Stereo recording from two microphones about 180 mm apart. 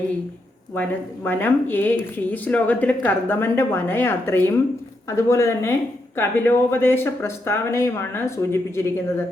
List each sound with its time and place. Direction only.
0.7 s a woman's voice: 10° left (ahead or behind)